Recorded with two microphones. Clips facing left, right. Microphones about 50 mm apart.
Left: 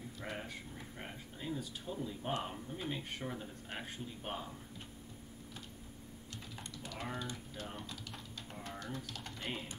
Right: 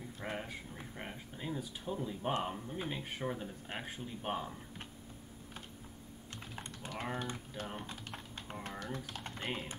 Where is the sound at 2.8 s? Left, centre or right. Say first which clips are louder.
Right 2 dB; centre.